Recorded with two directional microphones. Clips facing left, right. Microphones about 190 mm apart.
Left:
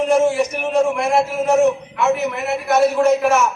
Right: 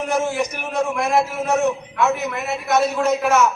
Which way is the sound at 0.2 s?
25° left (ahead or behind).